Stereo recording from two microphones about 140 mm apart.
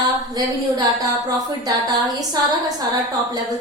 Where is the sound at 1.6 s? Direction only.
25° right (ahead or behind).